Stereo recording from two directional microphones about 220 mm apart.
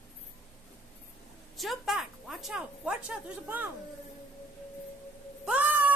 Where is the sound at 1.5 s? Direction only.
Centre (ahead or behind).